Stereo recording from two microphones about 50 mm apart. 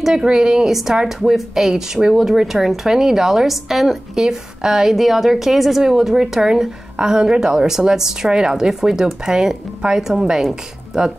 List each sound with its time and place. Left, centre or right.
0.0 s speech: centre